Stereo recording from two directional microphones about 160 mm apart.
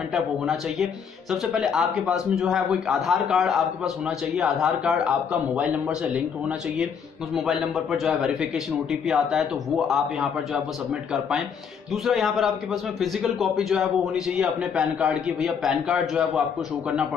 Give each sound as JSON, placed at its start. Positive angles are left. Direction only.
{"t": 0.1, "sound": "a man's voice", "side_deg": 0}
{"t": 7.3, "sound": "a man's voice", "side_deg": 0}